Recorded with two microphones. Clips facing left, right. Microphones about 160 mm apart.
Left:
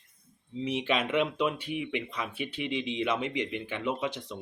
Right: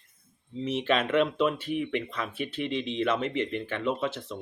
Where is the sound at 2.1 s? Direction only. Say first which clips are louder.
Right 2 dB; 15° left (ahead or behind).